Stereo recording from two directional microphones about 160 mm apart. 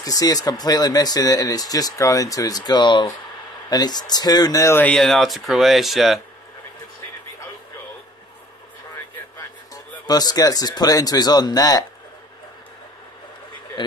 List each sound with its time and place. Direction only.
0.0 s speech: 20° left (ahead or behind); by 6.2 s centre (ahead or behind)
10.0 s speech: 25° left (ahead or behind)
13.8 s speech: 30° left (ahead or behind)